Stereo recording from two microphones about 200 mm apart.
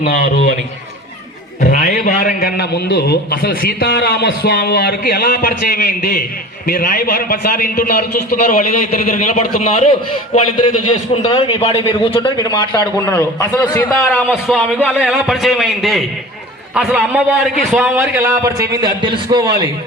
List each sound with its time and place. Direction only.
1.6 s a man's voice: 50° left (ahead or behind); by 17.9 s centre (ahead or behind)
17.9 s a man's voice: 15° right (ahead or behind)